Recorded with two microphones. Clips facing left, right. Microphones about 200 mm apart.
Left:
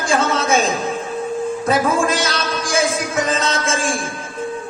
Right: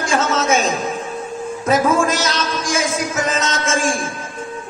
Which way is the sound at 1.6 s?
35° left (ahead or behind).